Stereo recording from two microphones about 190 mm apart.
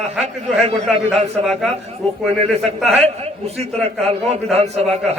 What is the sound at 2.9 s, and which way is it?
A man's voice, 35° right (ahead or behind).